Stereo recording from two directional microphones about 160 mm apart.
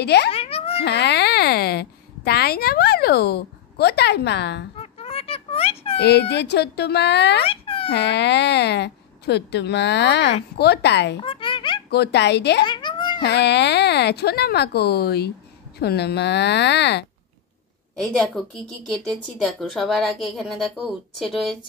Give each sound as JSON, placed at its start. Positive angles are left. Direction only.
{"t": 0.0, "sound": "a woman's voice", "side_deg": 90}
{"t": 0.3, "sound": "a sound", "side_deg": 35}
{"t": 0.8, "sound": "a child's voice", "side_deg": 90}
{"t": 4.7, "sound": "a sound", "side_deg": 40}
{"t": 5.9, "sound": "a woman's voice", "side_deg": 90}
{"t": 7.4, "sound": "a sound", "side_deg": 35}
{"t": 7.9, "sound": "a woman's voice", "side_deg": 90}
{"t": 11.1, "sound": "a sound", "side_deg": 35}
{"t": 11.9, "sound": "a woman's voice", "side_deg": 90}
{"t": 12.6, "sound": "babbling", "side_deg": 30}
{"t": 13.2, "sound": "a woman's voice", "side_deg": 90}
{"t": 18.0, "sound": "a woman's voice", "side_deg": 0}